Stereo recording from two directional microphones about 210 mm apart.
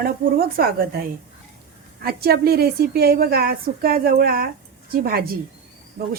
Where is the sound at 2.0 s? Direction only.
45° right (ahead or behind).